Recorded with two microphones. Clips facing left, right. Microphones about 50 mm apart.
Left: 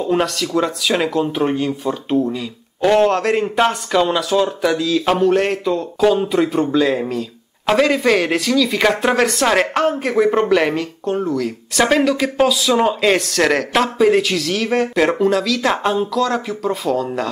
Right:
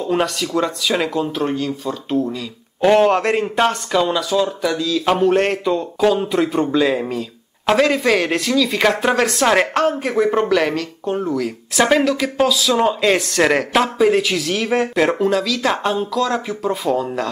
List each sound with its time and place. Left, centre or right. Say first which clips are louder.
0.1 s speech: even; centre
1.3 s speech: left 2 dB; centre
2.8 s a man's voice: right 1 dB; centre
3.3 s speech: left 1 dB; centre
5.1 s speech: right 1 dB; centre
11.1 s speech: left 1 dB; centre